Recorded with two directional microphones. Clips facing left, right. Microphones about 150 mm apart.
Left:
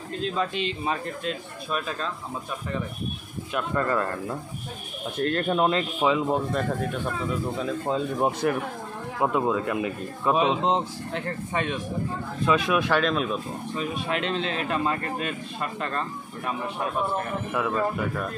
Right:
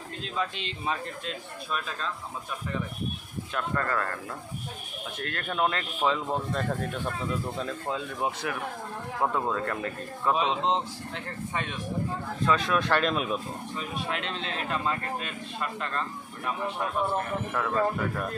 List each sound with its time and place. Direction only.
0.8 s speech: 50° left (ahead or behind)
3.5 s speech: 15° left (ahead or behind)
5.9 s speech: 10° left (ahead or behind)
7.9 s speech: 25° left (ahead or behind)
8.2 s speech: 45° left (ahead or behind)
9.2 s speech: 15° left (ahead or behind)
11.1 s speech: 60° left (ahead or behind)
12.4 s speech: 10° left (ahead or behind)
13.0 s speech: 5° right (ahead or behind)
13.7 s speech: 70° left (ahead or behind)
14.7 s speech: 55° left (ahead or behind)
17.5 s speech: 10° left (ahead or behind)